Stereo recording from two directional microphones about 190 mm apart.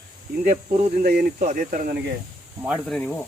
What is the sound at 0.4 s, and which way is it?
Speech, 40° right (ahead or behind).